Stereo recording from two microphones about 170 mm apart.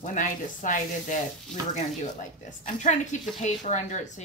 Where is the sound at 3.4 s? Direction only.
45° left (ahead or behind).